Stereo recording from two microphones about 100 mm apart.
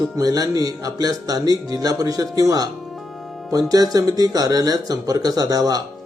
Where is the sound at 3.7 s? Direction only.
40° right (ahead or behind).